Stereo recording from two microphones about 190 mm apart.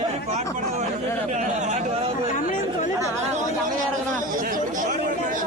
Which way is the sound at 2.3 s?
40° left (ahead or behind).